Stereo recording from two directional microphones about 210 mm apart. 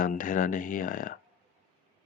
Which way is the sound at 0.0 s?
40° left (ahead or behind).